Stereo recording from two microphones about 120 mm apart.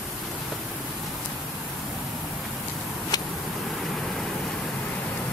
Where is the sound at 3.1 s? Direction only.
35° left (ahead or behind).